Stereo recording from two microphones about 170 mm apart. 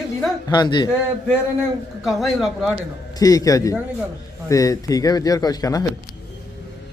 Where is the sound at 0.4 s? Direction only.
25° left (ahead or behind).